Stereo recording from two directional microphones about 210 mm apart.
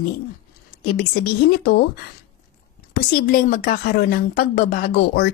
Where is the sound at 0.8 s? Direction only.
50° left (ahead or behind).